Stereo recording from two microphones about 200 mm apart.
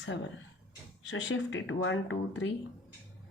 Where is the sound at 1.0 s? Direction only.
65° left (ahead or behind).